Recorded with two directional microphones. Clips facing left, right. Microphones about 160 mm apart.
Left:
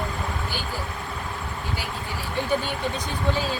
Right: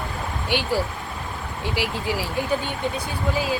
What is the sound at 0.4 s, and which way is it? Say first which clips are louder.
Speech: right 7 dB; 85° right.